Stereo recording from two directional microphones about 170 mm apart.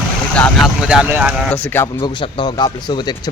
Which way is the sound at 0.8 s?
5° right (ahead or behind).